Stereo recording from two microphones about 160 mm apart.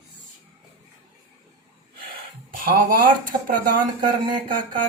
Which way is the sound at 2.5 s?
60° right (ahead or behind).